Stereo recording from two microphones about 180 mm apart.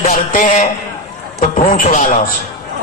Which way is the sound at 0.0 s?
35° left (ahead or behind).